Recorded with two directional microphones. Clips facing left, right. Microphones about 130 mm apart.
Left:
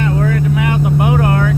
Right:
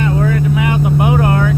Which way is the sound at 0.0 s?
15° right (ahead or behind).